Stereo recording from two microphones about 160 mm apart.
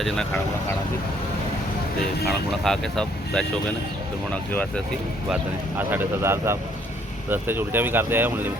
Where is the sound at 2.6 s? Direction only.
5° left (ahead or behind).